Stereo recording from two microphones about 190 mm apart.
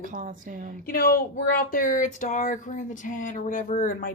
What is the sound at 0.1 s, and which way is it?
Speech, 45° right (ahead or behind).